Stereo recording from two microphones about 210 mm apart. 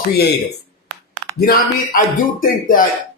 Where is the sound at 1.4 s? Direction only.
45° left (ahead or behind).